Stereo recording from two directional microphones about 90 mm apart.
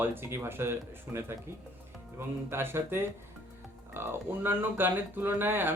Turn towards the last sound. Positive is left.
turn(degrees=-25)  # may be behind; listen again after turning